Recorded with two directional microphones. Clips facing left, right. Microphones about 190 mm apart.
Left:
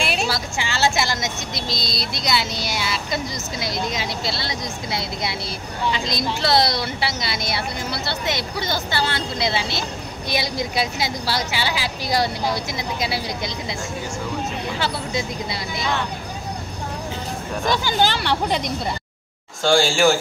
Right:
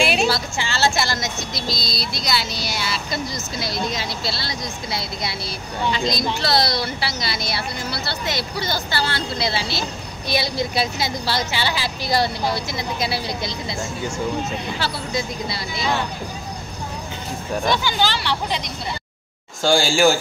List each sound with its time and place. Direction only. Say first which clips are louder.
0.0 s a sound: right 5 dB; centre (ahead or behind)
0.3 s speech: right 2 dB; 15° left (ahead or behind)
6.4 s speech: left 3 dB; 20° left (ahead or behind)
14.8 s speech: left 2 dB; 20° left (ahead or behind)
17.8 s speech: left 2 dB; 50° left (ahead or behind)
19.6 s speech: even; 5° right (ahead or behind)